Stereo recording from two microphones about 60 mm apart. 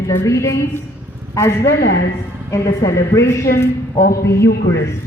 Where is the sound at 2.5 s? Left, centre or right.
Left.